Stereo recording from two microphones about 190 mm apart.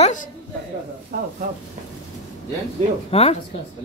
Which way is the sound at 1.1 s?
45° right (ahead or behind).